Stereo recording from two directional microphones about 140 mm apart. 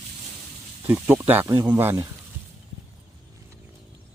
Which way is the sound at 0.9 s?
15° right (ahead or behind).